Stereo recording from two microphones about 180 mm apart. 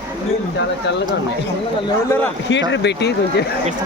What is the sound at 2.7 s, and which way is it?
Speech, 70° left (ahead or behind).